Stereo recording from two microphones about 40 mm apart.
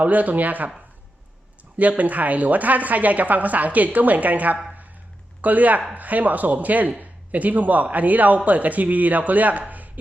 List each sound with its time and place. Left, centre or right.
0.0 s a woman's voice: right
1.8 s a woman's voice: right